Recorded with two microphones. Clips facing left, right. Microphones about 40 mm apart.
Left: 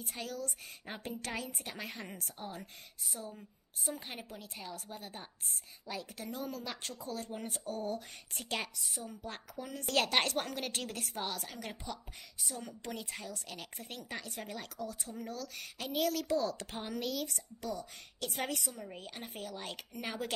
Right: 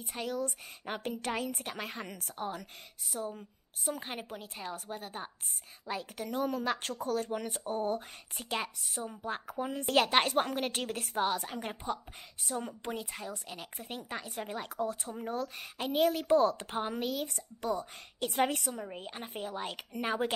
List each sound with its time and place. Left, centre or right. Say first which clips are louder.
0.0 s a woman's voice: right 6 dB; right
4.0 s a woman's voice: right 5 dB; right
8.4 s speech: right 3 dB; centre
8.9 s a woman's voice: right 5 dB; right
9.2 s speech: right 7 dB; centre
9.6 s speech: right 4 dB; right
10.4 s a woman's voice: right 5 dB; right
12.9 s speech: right 3 dB; centre
14.8 s a woman's voice: right 8 dB; right
16.7 s speech: right 4 dB; right
17.6 s a woman's voice: right 7 dB; right
18.9 s speech: right 3 dB; centre